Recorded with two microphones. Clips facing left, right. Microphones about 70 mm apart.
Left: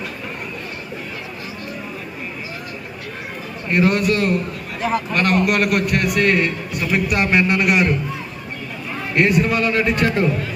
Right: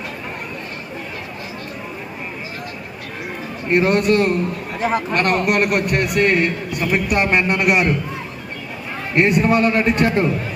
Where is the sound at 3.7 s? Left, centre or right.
Right.